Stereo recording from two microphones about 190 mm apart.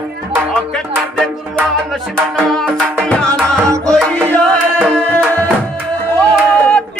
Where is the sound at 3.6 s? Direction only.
15° right (ahead or behind).